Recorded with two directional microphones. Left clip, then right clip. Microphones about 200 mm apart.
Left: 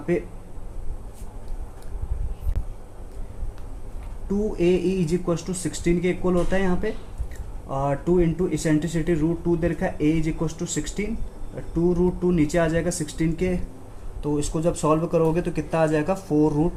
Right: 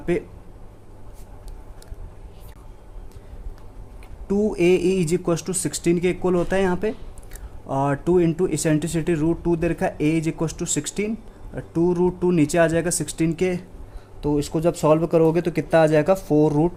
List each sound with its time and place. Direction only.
4.3 s speech: 50° right (ahead or behind)